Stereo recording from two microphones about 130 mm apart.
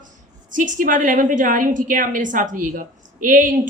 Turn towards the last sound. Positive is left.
turn(degrees=-90)